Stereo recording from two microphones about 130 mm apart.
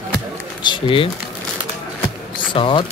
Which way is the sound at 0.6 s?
40° left (ahead or behind).